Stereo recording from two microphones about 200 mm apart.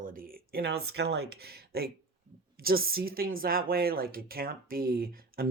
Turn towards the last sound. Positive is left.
turn(degrees=-45)  # may be behind; listen again after turning